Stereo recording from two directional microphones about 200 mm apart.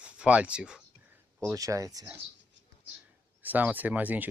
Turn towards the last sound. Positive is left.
turn(degrees=-10)  # may be behind; listen again after turning